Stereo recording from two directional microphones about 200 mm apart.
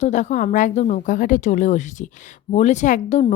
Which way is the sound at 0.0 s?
35° left (ahead or behind).